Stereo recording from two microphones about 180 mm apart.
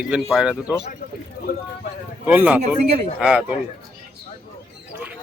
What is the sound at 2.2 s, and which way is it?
A man's voice, 10° right (ahead or behind).